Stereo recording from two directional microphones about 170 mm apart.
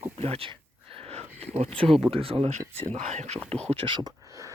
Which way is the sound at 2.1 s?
35° right (ahead or behind).